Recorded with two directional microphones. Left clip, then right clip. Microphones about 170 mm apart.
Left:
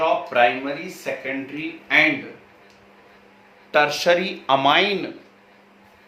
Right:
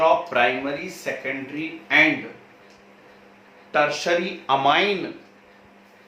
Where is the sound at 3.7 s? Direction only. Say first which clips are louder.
Left 3 dB; 65° left (ahead or behind); by 4.9 s 45° left (ahead or behind).